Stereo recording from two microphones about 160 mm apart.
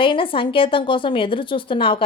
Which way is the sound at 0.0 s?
30° left (ahead or behind).